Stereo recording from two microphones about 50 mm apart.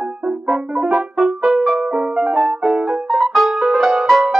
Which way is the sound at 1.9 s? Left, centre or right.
Centre.